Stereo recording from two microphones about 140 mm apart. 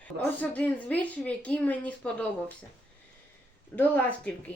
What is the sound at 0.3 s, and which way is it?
A woman's voice, 10° left (ahead or behind).